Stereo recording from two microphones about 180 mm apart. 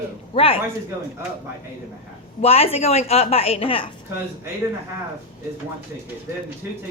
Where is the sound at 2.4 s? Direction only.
35° left (ahead or behind).